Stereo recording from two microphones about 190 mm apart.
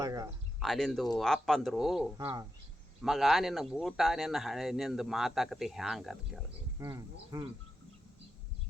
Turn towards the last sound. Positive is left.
turn(degrees=-20)  # may be behind; listen again after turning